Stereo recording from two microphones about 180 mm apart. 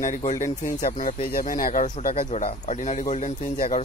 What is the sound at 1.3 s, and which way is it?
Speech, 50° left (ahead or behind).